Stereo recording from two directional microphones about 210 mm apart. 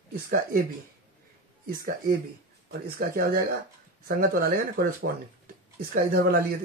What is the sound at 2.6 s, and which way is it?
Speech, 45° right (ahead or behind).